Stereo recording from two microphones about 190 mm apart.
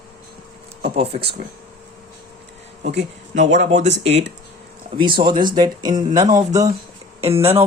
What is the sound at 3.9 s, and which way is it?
Speech, 65° right (ahead or behind).